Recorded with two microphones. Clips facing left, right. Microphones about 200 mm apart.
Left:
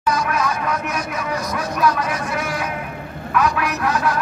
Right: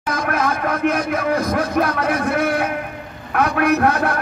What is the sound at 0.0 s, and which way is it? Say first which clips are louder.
A man's voice: even; 55° right (ahead or behind).